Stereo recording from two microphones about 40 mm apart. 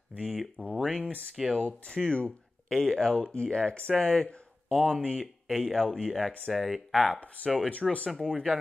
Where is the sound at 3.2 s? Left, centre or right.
Left.